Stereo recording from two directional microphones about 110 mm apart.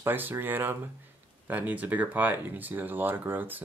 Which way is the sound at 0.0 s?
20° right (ahead or behind).